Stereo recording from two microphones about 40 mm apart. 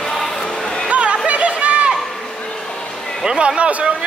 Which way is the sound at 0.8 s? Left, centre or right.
Right.